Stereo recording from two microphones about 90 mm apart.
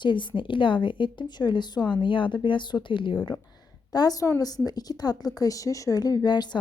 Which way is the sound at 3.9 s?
45° left (ahead or behind).